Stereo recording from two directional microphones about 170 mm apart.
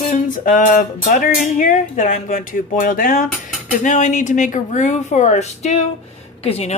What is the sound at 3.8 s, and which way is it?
Speech, 45° left (ahead or behind).